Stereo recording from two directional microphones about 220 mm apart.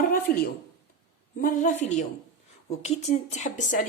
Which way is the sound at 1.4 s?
35° left (ahead or behind).